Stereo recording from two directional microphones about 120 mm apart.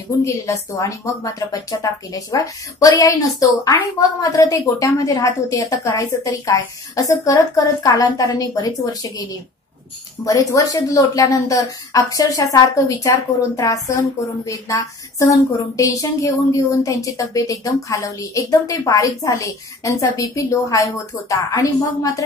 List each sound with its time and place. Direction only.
0.2 s a woman's voice: 25° left (ahead or behind)
10.2 s a woman's voice: 30° left (ahead or behind)